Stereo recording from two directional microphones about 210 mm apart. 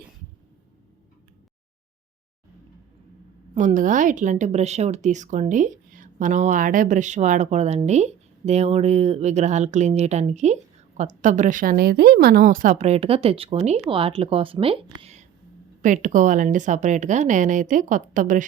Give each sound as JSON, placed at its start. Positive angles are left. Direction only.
{"t": 3.5, "sound": "a woman's voice", "side_deg": -35}